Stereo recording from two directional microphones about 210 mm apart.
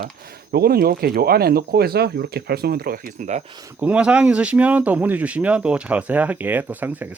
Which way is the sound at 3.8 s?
5° right (ahead or behind).